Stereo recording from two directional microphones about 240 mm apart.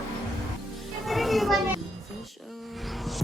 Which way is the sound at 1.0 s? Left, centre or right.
Centre.